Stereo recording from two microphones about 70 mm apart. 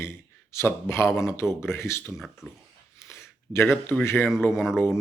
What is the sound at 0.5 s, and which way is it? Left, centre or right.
Speech, left.